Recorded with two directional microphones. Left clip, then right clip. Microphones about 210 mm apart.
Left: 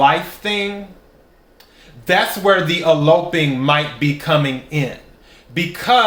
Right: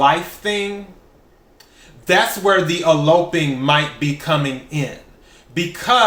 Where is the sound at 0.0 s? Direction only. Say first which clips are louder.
Left 1 dB; 15° left (ahead or behind).